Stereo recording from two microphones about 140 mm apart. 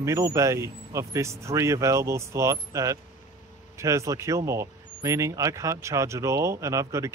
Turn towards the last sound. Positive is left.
turn(degrees=-20)  # may be behind; listen again after turning